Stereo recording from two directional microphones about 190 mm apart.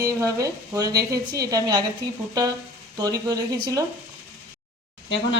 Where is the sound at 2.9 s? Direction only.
20° right (ahead or behind).